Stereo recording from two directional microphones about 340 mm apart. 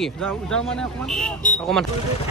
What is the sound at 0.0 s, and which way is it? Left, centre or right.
Speech, centre.